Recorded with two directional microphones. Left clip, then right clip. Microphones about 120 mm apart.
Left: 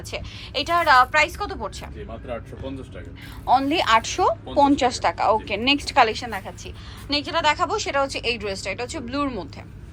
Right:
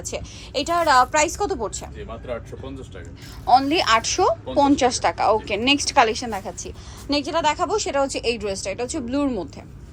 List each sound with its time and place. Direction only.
0.0 s a woman's voice: 30° right (ahead or behind)
3.4 s a woman's voice: 25° right (ahead or behind)